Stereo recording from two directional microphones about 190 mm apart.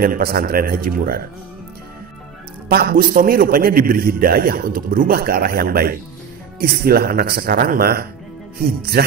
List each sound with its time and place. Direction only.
0.0 s a man's voice: 50° right (ahead or behind)
2.7 s a man's voice: 50° right (ahead or behind)